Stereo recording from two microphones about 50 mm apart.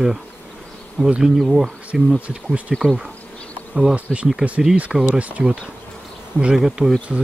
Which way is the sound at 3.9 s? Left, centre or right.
Right.